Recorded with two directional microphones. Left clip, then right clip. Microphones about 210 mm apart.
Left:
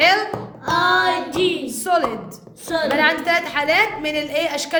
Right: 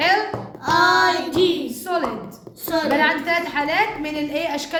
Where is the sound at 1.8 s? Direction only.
30° left (ahead or behind).